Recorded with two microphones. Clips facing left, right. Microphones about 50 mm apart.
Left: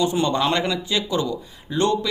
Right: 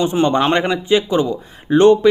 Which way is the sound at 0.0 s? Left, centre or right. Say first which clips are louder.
Right 5 dB; right.